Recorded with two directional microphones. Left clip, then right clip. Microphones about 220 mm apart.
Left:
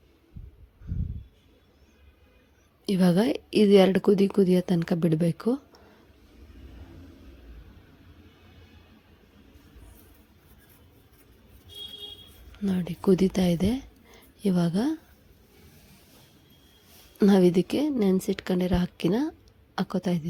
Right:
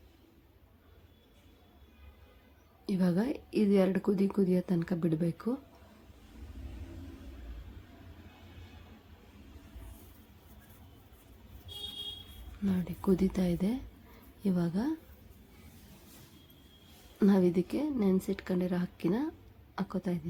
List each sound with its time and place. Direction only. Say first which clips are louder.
2.8 s speech: left 9 dB; 30° left (ahead or behind)
12.6 s speech: left 7 dB; 25° left (ahead or behind)
17.2 s speech: left 7 dB; 30° left (ahead or behind)